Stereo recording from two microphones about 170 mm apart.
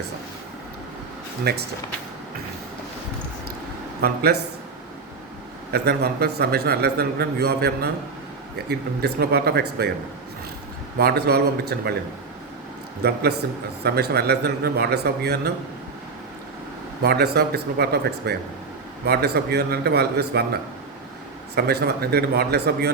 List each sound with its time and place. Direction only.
1.5 s a man's voice: 70° right (ahead or behind)
4.0 s a man's voice: 65° right (ahead or behind)
5.7 s a man's voice: 70° right (ahead or behind)
10.9 s a man's voice: 65° right (ahead or behind)
13.0 s a man's voice: 70° right (ahead or behind)
17.0 s a man's voice: 70° right (ahead or behind)